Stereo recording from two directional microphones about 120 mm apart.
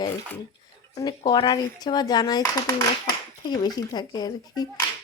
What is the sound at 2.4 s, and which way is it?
Speech, 20° left (ahead or behind).